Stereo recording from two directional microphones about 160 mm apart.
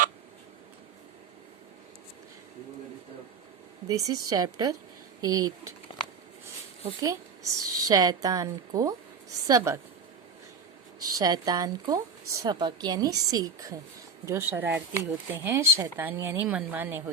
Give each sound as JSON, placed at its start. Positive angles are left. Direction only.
{"t": 3.8, "sound": "speech", "side_deg": -20}
{"t": 7.0, "sound": "speech", "side_deg": -20}
{"t": 11.0, "sound": "speech", "side_deg": -25}